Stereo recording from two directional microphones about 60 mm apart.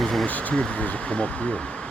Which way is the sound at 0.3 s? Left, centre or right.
Left.